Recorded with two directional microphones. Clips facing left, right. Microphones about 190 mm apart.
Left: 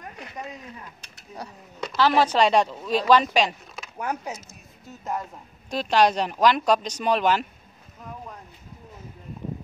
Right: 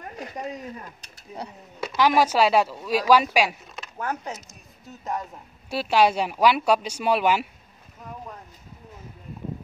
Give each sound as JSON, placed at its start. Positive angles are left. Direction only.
{"t": 0.1, "sound": "speech", "side_deg": -35}
{"t": 1.8, "sound": "speech", "side_deg": -10}
{"t": 4.0, "sound": "speech", "side_deg": 10}
{"t": 5.7, "sound": "speech", "side_deg": -10}